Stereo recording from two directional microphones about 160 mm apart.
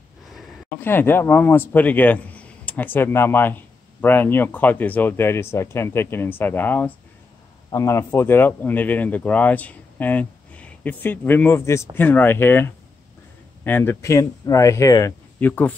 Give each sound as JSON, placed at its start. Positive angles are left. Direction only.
{"t": 0.7, "sound": "a man's voice", "side_deg": 15}